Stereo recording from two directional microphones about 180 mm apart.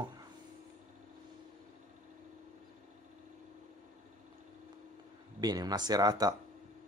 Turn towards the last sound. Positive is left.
turn(degrees=-20)  # may be behind; listen again after turning